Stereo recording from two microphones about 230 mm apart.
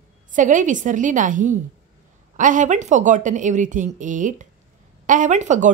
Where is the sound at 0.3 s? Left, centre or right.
Right.